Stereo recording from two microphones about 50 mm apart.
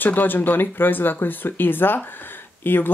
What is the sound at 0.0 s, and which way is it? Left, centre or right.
Speech, left.